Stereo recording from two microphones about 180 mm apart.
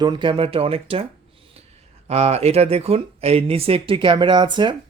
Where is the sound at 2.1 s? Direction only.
35° right (ahead or behind).